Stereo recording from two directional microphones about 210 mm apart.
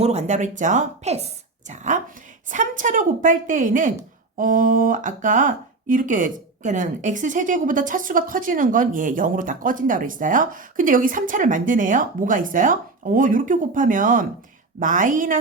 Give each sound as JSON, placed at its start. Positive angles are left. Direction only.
{"t": 0.0, "sound": "speech", "side_deg": -30}